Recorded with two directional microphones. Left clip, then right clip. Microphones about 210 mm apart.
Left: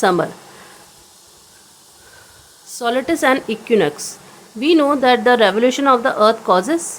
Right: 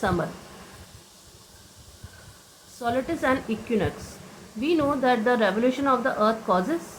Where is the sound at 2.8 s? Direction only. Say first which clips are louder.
Left 9 dB; 65° left (ahead or behind).